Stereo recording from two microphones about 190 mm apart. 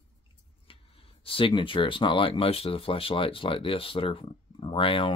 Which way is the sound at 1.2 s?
25° left (ahead or behind).